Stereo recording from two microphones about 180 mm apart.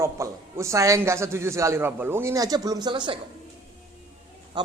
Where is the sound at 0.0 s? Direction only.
15° right (ahead or behind).